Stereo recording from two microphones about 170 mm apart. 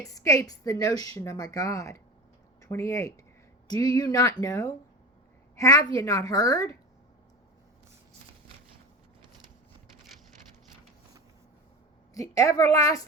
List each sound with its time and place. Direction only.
0.1 s a woman's voice: 20° left (ahead or behind)
12.1 s a woman's voice: 20° left (ahead or behind)